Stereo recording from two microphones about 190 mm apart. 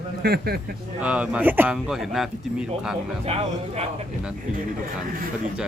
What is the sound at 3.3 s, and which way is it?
Speech, 35° right (ahead or behind).